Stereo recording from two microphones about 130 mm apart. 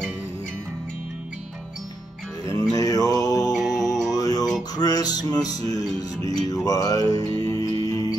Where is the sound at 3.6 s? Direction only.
Centre (ahead or behind).